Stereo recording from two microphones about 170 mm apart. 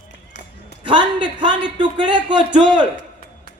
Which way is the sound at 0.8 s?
30° right (ahead or behind).